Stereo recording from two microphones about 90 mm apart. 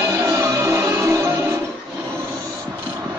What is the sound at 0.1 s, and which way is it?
Music, 35° right (ahead or behind).